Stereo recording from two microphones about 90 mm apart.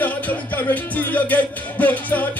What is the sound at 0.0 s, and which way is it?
Music, 20° left (ahead or behind).